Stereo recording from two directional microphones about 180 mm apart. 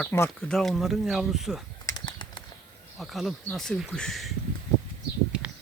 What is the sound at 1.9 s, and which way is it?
Bird flight, 25° left (ahead or behind).